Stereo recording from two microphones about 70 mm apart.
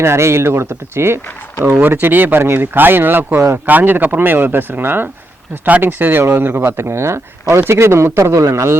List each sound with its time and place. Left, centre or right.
0.0 s speech: right